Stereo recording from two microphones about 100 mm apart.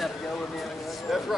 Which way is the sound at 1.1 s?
Centre (ahead or behind).